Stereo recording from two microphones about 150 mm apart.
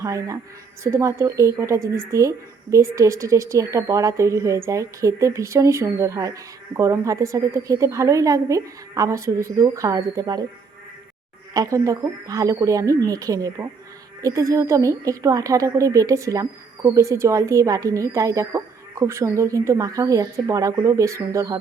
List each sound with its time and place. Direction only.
0.0 s a woman's voice: 20° right (ahead or behind)
11.5 s speech: 25° right (ahead or behind)